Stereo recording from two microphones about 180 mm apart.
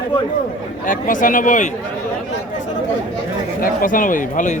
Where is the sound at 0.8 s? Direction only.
45° left (ahead or behind).